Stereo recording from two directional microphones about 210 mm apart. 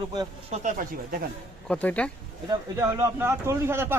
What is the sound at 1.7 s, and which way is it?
Speech, 5° left (ahead or behind).